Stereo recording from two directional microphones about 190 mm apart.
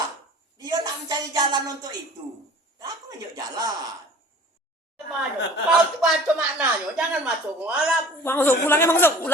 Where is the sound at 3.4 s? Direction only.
20° right (ahead or behind).